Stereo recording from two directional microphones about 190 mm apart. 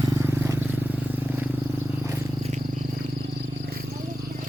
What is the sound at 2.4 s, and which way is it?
Cricket, 35° right (ahead or behind).